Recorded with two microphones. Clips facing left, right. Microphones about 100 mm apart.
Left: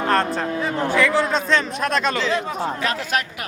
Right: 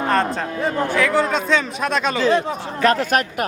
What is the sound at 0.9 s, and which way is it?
Speech, centre (ahead or behind).